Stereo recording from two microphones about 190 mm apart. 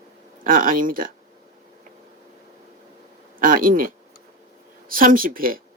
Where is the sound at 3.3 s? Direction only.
45° right (ahead or behind).